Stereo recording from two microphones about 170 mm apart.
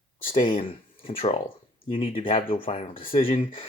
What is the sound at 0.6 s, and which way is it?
Speech, 35° left (ahead or behind).